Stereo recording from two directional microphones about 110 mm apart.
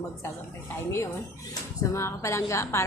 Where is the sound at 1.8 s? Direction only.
25° left (ahead or behind).